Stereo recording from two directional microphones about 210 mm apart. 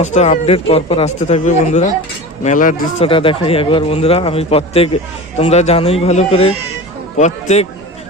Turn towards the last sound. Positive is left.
turn(degrees=35)  # may be behind; listen again after turning